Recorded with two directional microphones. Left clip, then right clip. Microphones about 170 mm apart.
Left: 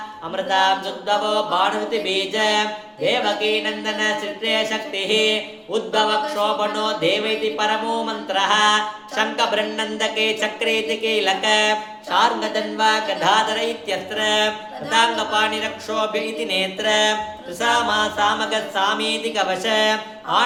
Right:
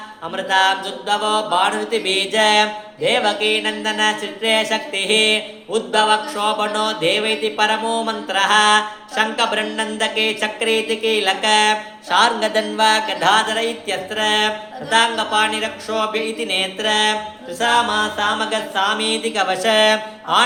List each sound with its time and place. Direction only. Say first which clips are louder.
0.3 s mantra: right 2 dB; 25° right (ahead or behind)